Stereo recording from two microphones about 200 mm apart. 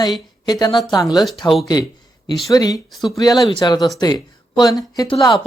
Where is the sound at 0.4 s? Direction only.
20° left (ahead or behind).